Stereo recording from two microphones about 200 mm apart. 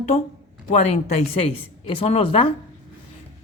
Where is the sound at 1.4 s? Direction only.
30° left (ahead or behind).